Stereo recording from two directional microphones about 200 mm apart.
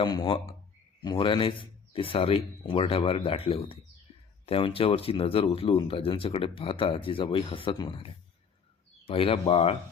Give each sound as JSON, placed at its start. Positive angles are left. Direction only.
{"t": 0.0, "sound": "speech", "side_deg": 20}